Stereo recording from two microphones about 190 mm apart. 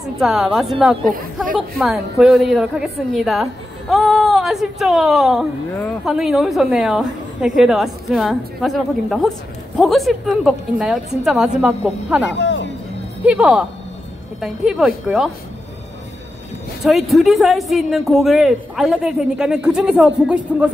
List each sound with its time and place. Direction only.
0.2 s speech: centre (ahead or behind)
1.0 s speech: 45° right (ahead or behind)
1.8 s speech: centre (ahead or behind)
12.3 s a sound: 70° left (ahead or behind)
13.2 s speech: 5° right (ahead or behind)
16.8 s speech: centre (ahead or behind)